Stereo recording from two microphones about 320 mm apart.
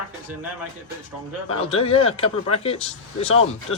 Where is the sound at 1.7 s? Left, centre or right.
Centre.